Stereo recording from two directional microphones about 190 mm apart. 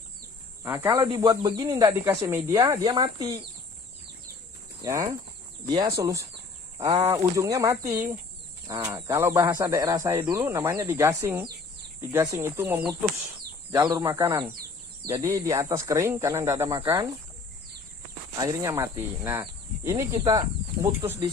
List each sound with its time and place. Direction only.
0.6 s speech: 10° right (ahead or behind)
4.8 s speech: 20° right (ahead or behind)
18.3 s speech: 20° right (ahead or behind)